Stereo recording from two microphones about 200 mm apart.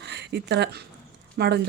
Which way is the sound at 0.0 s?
55° right (ahead or behind).